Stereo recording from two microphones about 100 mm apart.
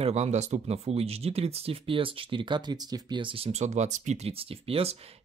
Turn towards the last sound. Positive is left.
turn(degrees=-85)